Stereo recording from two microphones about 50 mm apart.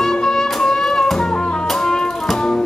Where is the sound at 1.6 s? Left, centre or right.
Centre.